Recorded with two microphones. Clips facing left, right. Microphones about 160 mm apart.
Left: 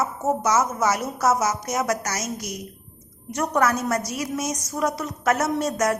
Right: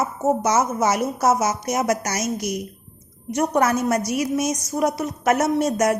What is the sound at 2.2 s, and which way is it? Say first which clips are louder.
A woman's voice: right 6 dB; 15° right (ahead or behind).